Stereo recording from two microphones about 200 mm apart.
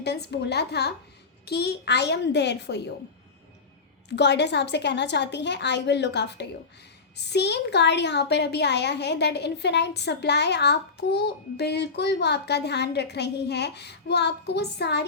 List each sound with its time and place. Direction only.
0.0 s a woman's voice: 55° left (ahead or behind)
4.1 s a woman's voice: 60° left (ahead or behind)